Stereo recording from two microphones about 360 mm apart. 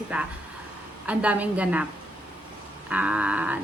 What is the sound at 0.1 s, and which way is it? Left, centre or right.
Speech, centre.